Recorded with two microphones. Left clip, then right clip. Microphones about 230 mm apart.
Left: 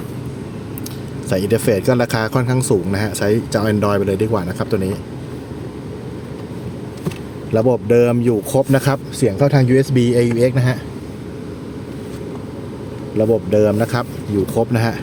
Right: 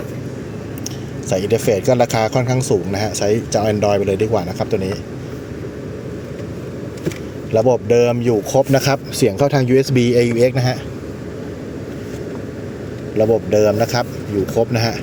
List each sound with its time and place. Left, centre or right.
1.3 s speech: centre
7.5 s speech: left
9.1 s speech: centre
9.9 s speech: centre
13.1 s speech: centre